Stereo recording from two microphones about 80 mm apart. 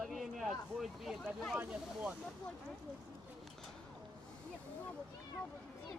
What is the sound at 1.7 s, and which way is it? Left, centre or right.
Speech, centre.